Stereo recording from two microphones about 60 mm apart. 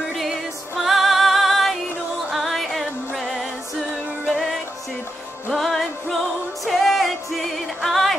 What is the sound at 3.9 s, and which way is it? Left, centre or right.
Music, right.